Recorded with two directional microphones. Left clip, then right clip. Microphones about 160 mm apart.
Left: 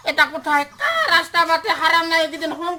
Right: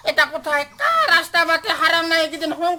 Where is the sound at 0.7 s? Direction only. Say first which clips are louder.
Right 5 dB; 30° right (ahead or behind).